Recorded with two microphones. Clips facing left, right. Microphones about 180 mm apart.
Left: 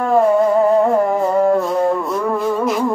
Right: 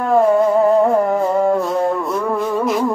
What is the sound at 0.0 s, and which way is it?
Music, centre (ahead or behind).